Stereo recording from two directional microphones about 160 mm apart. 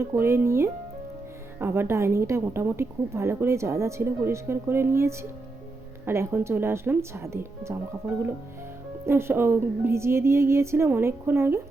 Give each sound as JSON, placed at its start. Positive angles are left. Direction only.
{"t": 0.0, "sound": "a woman's voice", "side_deg": -15}
{"t": 9.0, "sound": "a woman's voice", "side_deg": -15}